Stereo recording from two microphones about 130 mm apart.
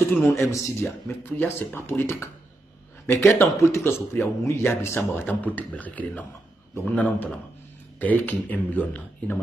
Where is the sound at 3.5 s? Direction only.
20° left (ahead or behind).